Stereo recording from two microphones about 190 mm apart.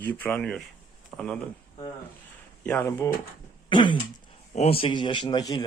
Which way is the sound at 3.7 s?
25° left (ahead or behind).